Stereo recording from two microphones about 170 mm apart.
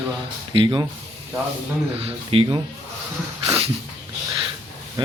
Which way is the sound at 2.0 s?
35° right (ahead or behind).